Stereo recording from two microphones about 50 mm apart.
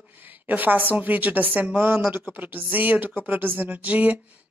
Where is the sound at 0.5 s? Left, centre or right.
Right.